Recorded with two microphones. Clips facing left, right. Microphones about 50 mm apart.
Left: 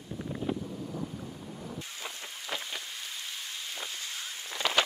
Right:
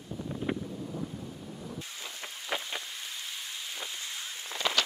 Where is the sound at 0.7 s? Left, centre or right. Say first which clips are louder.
Even; centre.